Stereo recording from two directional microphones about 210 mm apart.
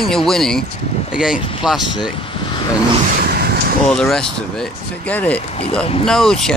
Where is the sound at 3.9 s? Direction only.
5° left (ahead or behind).